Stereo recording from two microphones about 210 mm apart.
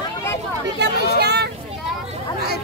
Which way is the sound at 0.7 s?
50° right (ahead or behind).